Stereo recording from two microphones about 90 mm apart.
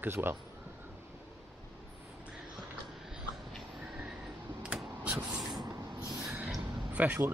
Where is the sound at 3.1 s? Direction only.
5° right (ahead or behind).